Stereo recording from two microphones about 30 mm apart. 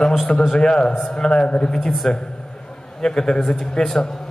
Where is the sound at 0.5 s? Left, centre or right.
Left.